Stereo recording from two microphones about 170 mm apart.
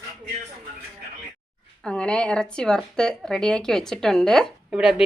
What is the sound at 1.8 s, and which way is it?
Speech, 5° left (ahead or behind).